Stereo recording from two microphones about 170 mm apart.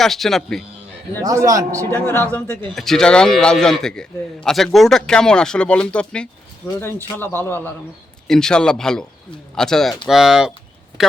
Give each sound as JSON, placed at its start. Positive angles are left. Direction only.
{"t": 0.0, "sound": "a man's voice", "side_deg": 0}
{"t": 1.2, "sound": "a man's voice", "side_deg": -20}
{"t": 1.9, "sound": "a man's voice", "side_deg": 10}